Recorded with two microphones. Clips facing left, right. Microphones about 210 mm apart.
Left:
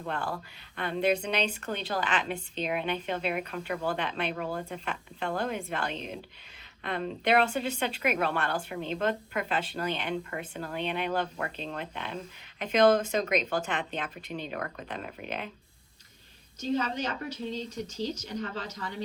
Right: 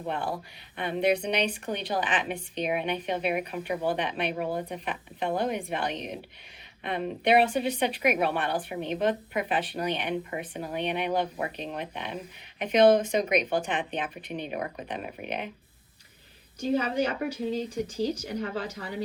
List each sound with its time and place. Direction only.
0.0 s speech: 20° right (ahead or behind)
16.6 s speech: 10° right (ahead or behind)